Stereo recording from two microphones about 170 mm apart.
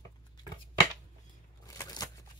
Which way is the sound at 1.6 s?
20° left (ahead or behind).